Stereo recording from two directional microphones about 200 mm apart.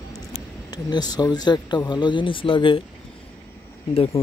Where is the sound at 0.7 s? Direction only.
20° left (ahead or behind).